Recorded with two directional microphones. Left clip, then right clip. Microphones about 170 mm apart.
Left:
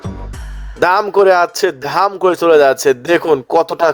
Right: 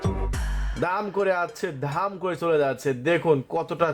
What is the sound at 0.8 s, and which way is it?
Speech, 50° left (ahead or behind).